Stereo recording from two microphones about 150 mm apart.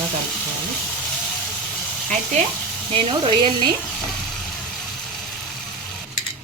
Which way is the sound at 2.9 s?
35° right (ahead or behind).